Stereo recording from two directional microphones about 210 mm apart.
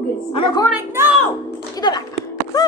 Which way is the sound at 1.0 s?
10° right (ahead or behind).